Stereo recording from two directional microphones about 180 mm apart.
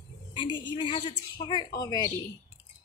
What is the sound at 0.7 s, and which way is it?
A woman's voice, 25° left (ahead or behind).